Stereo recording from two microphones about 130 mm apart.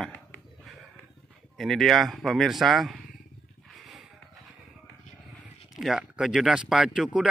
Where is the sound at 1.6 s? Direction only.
Centre (ahead or behind).